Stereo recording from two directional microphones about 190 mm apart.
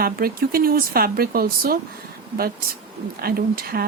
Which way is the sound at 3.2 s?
50° right (ahead or behind).